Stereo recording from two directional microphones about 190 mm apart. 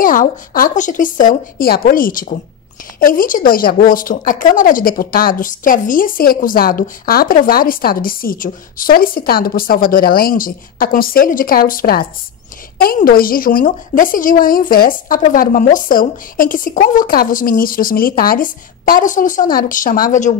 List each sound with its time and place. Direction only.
0.0 s speech: 45° left (ahead or behind)